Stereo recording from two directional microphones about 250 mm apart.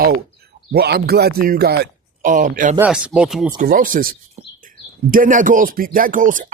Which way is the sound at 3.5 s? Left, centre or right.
Right.